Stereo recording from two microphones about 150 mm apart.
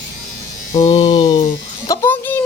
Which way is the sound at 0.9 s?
30° left (ahead or behind).